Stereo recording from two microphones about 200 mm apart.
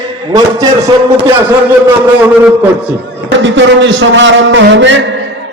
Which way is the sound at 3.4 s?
65° right (ahead or behind).